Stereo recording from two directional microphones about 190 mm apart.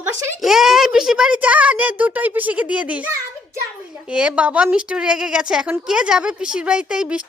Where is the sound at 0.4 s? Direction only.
Centre (ahead or behind).